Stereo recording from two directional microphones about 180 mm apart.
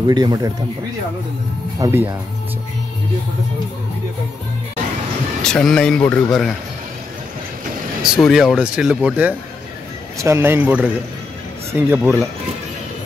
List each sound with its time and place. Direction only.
0.0 s speech: 20° right (ahead or behind)
1.8 s speech: 15° right (ahead or behind)
5.4 s speech: 5° left (ahead or behind)
8.0 s speech: centre (ahead or behind)